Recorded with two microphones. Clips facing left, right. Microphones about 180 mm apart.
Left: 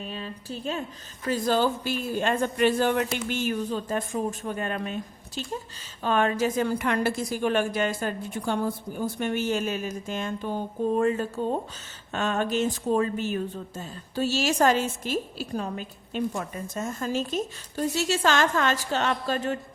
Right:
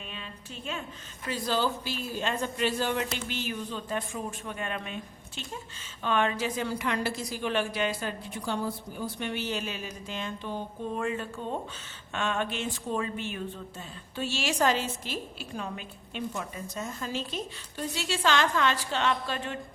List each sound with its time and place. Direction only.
0.0 s a sound: 35° left (ahead or behind)
1.3 s speech: 50° left (ahead or behind)
19.2 s mantra: 40° left (ahead or behind)